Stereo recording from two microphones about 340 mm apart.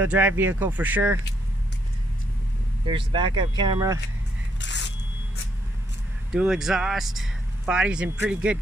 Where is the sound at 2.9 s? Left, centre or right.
Centre.